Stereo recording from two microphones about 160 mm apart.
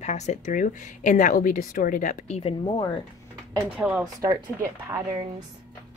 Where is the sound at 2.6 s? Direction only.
30° left (ahead or behind).